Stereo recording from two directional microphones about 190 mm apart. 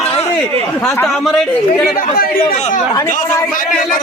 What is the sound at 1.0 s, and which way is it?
Speech, centre (ahead or behind).